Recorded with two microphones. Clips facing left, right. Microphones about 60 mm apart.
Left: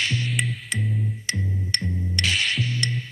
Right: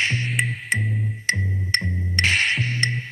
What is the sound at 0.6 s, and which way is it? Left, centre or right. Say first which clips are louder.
Music: right 4 dB; right.